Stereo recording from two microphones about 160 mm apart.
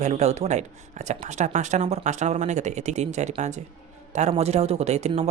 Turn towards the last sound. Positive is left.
turn(degrees=-45)  # may be behind; listen again after turning